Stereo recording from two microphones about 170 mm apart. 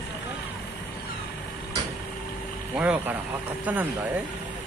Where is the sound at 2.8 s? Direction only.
5° right (ahead or behind).